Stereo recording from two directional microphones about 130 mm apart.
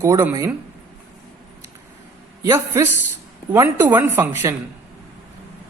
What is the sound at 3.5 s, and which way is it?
Speech, 20° right (ahead or behind).